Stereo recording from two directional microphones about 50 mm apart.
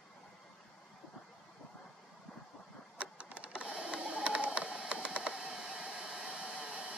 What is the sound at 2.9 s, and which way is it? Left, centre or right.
Printer, right.